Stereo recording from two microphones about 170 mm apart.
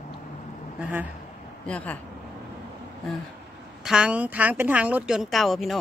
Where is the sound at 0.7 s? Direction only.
10° right (ahead or behind).